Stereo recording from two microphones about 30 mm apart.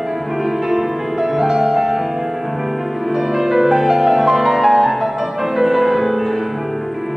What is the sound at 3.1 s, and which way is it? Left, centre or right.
Music, centre.